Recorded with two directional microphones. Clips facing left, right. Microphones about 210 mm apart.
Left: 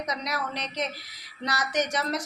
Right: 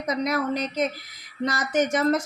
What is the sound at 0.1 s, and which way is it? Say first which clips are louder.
A woman's voice: right 12 dB; 50° right (ahead or behind).